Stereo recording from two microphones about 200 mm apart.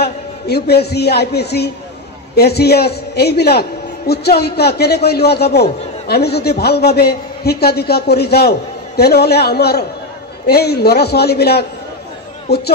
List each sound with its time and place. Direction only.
0.0 s a man's voice: 50° left (ahead or behind)